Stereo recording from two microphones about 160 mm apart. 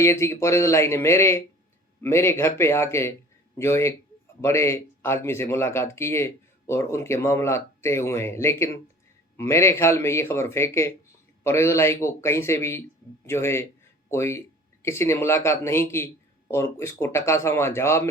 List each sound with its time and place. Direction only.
0.0 s speech: 15° left (ahead or behind)